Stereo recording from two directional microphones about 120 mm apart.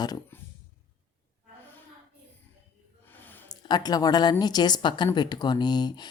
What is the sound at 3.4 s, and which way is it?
Speech, 35° left (ahead or behind).